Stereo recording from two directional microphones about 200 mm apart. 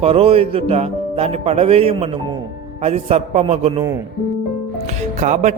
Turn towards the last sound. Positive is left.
turn(degrees=-35)  # may be behind; listen again after turning